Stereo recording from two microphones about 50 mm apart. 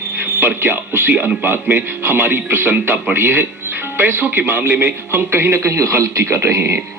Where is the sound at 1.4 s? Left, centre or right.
Right.